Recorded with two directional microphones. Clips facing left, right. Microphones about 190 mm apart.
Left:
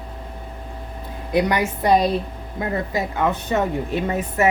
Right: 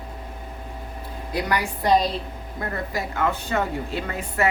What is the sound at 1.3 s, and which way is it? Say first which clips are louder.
Speech: left 6 dB; 20° left (ahead or behind).